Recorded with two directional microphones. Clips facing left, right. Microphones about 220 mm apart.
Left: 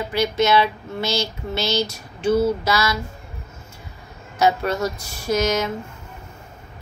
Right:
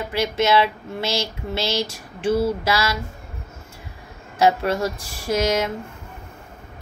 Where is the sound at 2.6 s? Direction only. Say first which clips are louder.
Left 1 dB; 30° right (ahead or behind).